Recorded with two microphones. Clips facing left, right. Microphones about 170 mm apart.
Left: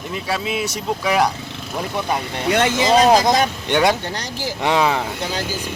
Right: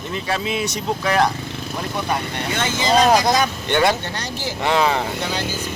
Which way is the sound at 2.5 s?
65° left (ahead or behind).